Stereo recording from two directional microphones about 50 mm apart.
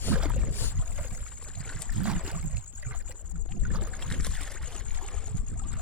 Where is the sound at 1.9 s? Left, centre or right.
Right.